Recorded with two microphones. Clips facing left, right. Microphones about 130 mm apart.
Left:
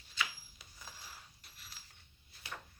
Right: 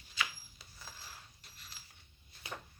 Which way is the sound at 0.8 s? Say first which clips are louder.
Right 1 dB; centre (ahead or behind).